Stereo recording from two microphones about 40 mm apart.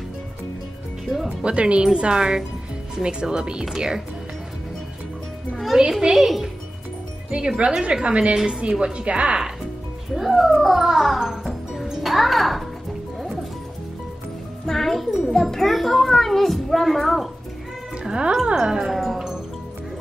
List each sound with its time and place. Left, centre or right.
1.0 s speech: centre
1.4 s speech: right
5.8 s a woman's voice: centre
7.2 s a woman's voice: right
10.1 s music: centre
14.7 s music: centre
15.5 s a child's voice: centre
18.0 s music: right
18.5 s speech: centre